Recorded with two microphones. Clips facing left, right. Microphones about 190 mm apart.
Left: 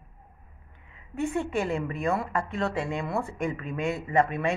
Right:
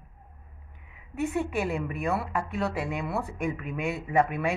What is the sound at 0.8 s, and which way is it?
A woman's voice, 5° right (ahead or behind).